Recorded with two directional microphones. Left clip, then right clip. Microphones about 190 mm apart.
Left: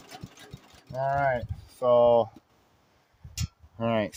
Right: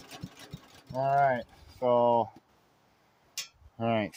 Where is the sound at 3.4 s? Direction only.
Centre (ahead or behind).